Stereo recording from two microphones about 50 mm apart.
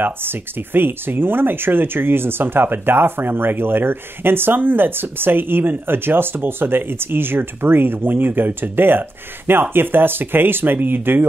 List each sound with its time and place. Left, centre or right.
0.0 s speech: right